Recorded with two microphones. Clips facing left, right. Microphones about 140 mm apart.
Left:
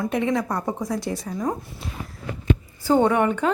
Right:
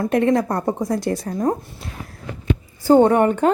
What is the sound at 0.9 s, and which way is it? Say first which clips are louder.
Speech: right 5 dB; 55° right (ahead or behind).